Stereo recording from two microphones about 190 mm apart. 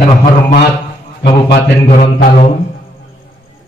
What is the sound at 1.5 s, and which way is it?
Music, 55° left (ahead or behind).